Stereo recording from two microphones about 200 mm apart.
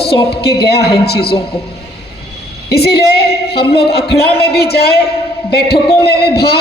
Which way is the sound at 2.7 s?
55° left (ahead or behind).